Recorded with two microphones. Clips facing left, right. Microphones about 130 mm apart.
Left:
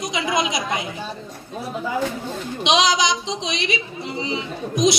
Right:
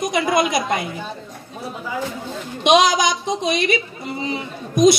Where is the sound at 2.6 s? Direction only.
50° right (ahead or behind).